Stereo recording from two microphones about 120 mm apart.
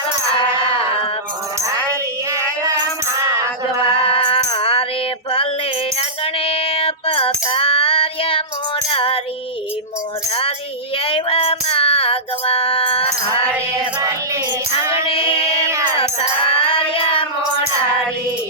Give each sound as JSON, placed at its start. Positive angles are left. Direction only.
{"t": 3.8, "sound": "music", "side_deg": 50}
{"t": 6.0, "sound": "female singing", "side_deg": 50}
{"t": 8.9, "sound": "music", "side_deg": 50}
{"t": 10.9, "sound": "music", "side_deg": 50}
{"t": 14.8, "sound": "female singing", "side_deg": -25}
{"t": 15.0, "sound": "female singing", "side_deg": 45}
{"t": 16.5, "sound": "child singing", "side_deg": 50}